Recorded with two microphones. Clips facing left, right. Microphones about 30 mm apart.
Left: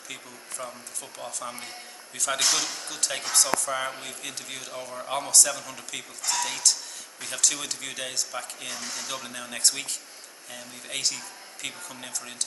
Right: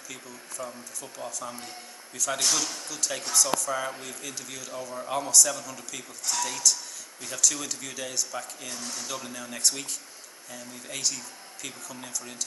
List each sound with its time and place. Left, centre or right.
0.1 s speech: left
4.9 s speech: centre